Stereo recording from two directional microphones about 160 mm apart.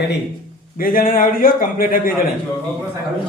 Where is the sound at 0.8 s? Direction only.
60° left (ahead or behind).